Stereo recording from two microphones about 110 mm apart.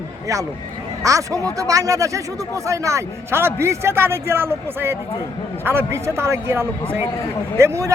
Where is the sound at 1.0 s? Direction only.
30° right (ahead or behind).